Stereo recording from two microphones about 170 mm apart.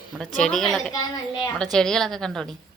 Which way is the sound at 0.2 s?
5° left (ahead or behind).